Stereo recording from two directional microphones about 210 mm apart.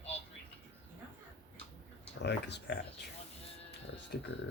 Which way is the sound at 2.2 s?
55° left (ahead or behind).